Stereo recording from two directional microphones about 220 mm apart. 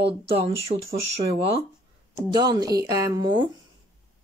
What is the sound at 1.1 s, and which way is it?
Speech, 25° right (ahead or behind).